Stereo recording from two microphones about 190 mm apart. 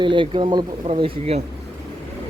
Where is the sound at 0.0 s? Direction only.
25° right (ahead or behind).